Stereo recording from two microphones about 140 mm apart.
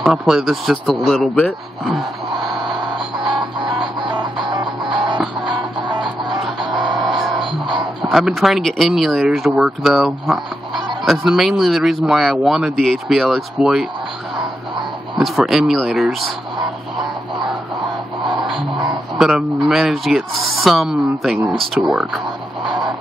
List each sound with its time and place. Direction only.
0.0 s speech: centre (ahead or behind)
3.3 s music: 30° right (ahead or behind)
5.9 s music: centre (ahead or behind)
8.0 s speech: centre (ahead or behind)
15.1 s speech: centre (ahead or behind)
18.2 s music: 35° right (ahead or behind)
19.1 s speech: 5° right (ahead or behind)